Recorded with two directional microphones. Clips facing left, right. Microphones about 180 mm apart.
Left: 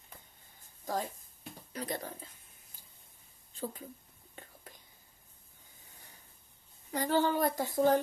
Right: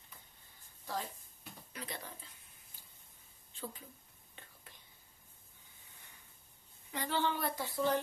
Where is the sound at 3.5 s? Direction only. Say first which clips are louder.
Left 6 dB; 45° left (ahead or behind).